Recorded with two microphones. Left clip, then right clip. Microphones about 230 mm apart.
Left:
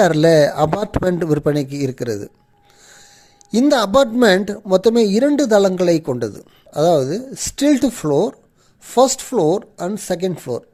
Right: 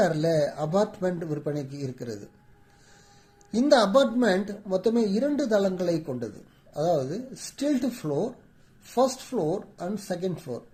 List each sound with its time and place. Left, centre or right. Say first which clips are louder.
0.0 s speech: left 12 dB; left
3.5 s speech: left 6 dB; left